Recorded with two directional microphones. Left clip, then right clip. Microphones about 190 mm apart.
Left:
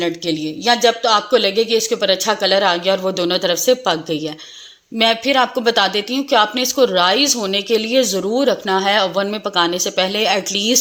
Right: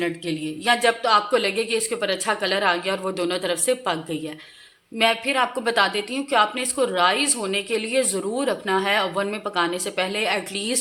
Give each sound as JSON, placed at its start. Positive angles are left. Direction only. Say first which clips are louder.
{"t": 0.0, "sound": "speech", "louder": "left 6 dB", "side_deg": 35}